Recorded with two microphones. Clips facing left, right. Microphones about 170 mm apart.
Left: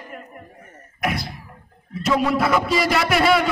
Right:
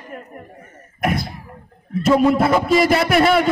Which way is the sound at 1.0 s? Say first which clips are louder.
Right 4 dB; 50° right (ahead or behind).